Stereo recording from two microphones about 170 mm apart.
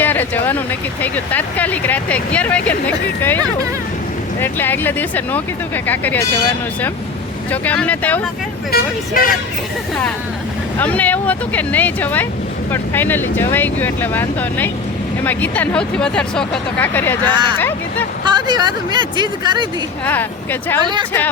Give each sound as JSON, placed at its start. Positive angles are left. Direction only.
{"t": 0.0, "sound": "speech", "side_deg": 10}
{"t": 7.5, "sound": "speech", "side_deg": 10}
{"t": 8.7, "sound": "speech", "side_deg": 60}
{"t": 10.8, "sound": "speech", "side_deg": 10}
{"t": 18.3, "sound": "speech", "side_deg": -25}
{"t": 20.1, "sound": "speech", "side_deg": 10}
{"t": 20.8, "sound": "speech", "side_deg": -25}